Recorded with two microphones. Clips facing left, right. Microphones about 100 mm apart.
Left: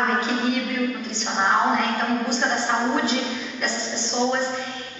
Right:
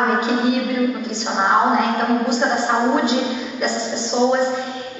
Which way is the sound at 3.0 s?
5° right (ahead or behind).